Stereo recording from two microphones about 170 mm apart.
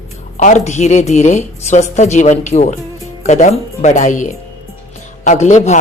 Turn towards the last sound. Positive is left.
turn(degrees=45)  # may be behind; listen again after turning